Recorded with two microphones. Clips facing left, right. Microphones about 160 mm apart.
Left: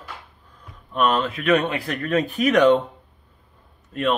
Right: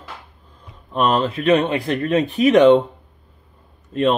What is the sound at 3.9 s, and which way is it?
Speech, 30° right (ahead or behind).